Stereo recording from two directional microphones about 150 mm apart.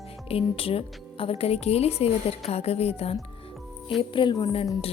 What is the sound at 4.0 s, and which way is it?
Speech, 35° left (ahead or behind).